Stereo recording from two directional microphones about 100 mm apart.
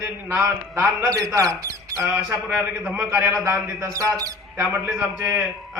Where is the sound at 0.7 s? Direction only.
20° right (ahead or behind).